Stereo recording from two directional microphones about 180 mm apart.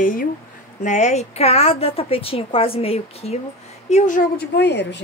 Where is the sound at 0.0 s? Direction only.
50° left (ahead or behind).